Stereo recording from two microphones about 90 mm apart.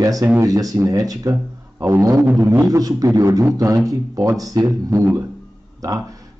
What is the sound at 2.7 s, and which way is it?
A man's voice, 40° right (ahead or behind).